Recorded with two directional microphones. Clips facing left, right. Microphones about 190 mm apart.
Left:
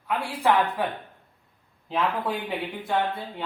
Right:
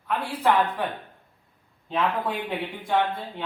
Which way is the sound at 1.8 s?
5° left (ahead or behind).